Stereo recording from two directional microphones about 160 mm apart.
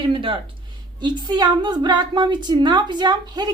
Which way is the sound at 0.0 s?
30° right (ahead or behind).